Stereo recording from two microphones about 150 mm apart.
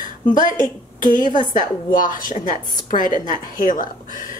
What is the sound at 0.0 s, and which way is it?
A woman's voice, 60° left (ahead or behind).